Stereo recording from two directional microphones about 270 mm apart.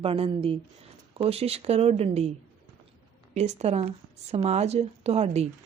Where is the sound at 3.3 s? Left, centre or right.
Right.